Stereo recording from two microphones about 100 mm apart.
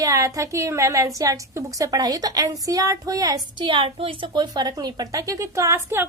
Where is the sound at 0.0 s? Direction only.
35° right (ahead or behind).